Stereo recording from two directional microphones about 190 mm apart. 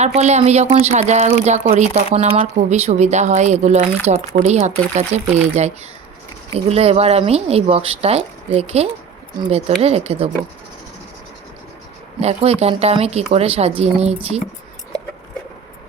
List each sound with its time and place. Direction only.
0.0 s speech: 35° right (ahead or behind)
12.2 s speech: 35° right (ahead or behind)